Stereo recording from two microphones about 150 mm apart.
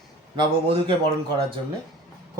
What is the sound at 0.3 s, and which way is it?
Speech, 35° right (ahead or behind).